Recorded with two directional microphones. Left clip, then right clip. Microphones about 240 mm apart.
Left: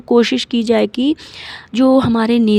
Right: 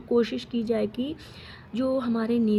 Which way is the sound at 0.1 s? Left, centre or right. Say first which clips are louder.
Left 11 dB; left.